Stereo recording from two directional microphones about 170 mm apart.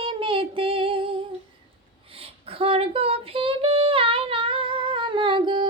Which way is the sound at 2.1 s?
35° right (ahead or behind).